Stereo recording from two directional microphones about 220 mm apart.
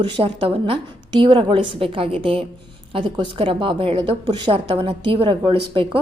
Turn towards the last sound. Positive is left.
turn(degrees=-25)  # may be behind; listen again after turning